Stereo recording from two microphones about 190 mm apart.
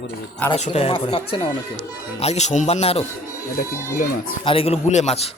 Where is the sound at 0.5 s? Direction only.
35° left (ahead or behind).